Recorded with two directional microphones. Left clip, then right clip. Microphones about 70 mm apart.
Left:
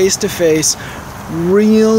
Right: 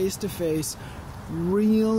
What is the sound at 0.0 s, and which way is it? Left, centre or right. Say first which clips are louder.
Speech: left 14 dB; right.